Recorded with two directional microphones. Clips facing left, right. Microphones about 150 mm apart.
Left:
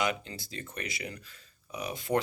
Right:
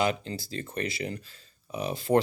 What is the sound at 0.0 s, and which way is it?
Speech, 35° right (ahead or behind).